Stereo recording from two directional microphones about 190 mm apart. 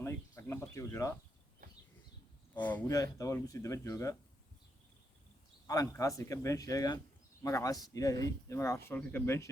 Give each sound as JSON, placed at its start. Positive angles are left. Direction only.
{"t": 0.0, "sound": "a sound", "side_deg": 15}
{"t": 2.6, "sound": "speech", "side_deg": 10}
{"t": 5.6, "sound": "speech", "side_deg": 15}